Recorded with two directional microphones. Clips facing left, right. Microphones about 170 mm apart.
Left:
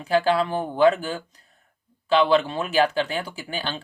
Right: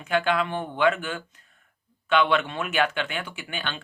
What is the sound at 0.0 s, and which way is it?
Speech, 35° left (ahead or behind).